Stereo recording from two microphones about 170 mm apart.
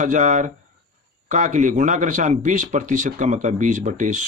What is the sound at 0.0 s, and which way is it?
Speech, 45° right (ahead or behind).